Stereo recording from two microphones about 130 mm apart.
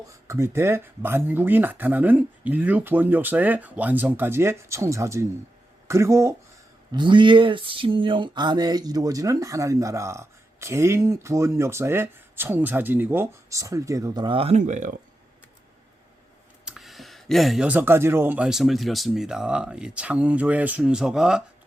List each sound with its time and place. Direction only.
0.1 s speech: 20° right (ahead or behind)
6.9 s speech: 35° right (ahead or behind)
14.5 s speech: 65° right (ahead or behind)
16.6 s speech: centre (ahead or behind)